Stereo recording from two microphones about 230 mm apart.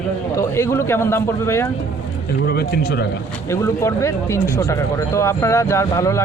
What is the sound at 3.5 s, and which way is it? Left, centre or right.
Speech, centre.